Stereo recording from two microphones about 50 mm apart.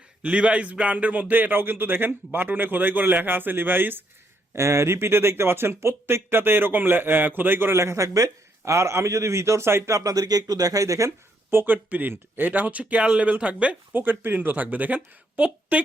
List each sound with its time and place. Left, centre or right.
0.2 s speech: right
4.5 s speech: right
7.8 s a man's voice: right
10.7 s speech: right
11.5 s a woman's voice: right
14.0 s a woman's voice: right